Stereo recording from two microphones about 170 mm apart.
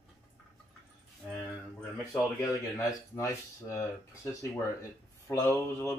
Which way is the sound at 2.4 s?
20° left (ahead or behind).